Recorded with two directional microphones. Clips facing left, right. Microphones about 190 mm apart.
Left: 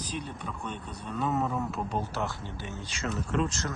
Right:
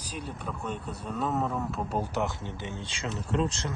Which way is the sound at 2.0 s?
15° right (ahead or behind).